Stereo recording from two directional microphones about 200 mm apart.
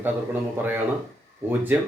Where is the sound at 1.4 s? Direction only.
10° right (ahead or behind).